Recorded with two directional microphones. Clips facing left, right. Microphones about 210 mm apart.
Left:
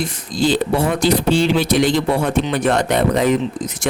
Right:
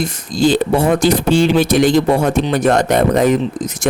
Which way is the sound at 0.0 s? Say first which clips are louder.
Right 4 dB; 45° right (ahead or behind).